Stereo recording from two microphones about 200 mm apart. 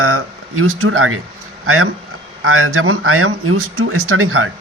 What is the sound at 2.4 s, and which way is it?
Speech, 90° right.